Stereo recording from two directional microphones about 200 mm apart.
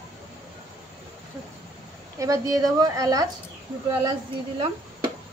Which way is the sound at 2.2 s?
15° right (ahead or behind).